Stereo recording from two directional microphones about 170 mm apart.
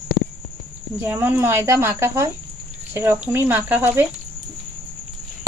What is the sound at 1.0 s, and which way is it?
Speech, 15° right (ahead or behind).